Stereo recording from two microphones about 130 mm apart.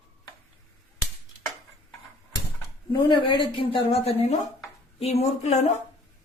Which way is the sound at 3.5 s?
50° left (ahead or behind).